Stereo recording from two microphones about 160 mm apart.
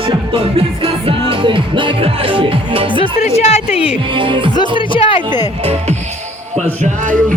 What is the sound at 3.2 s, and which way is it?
Speech, 40° left (ahead or behind).